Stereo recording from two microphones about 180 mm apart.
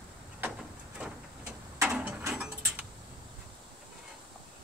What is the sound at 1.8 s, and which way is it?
Mechanisms, 5° right (ahead or behind).